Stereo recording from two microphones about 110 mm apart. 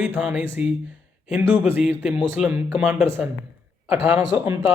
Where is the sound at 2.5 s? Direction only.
20° right (ahead or behind).